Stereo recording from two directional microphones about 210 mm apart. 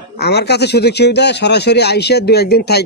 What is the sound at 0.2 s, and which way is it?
A man's voice, 50° left (ahead or behind).